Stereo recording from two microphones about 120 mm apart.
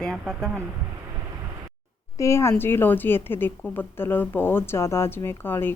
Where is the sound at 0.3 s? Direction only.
5° right (ahead or behind).